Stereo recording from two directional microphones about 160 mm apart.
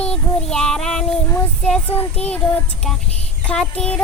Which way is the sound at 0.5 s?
5° left (ahead or behind).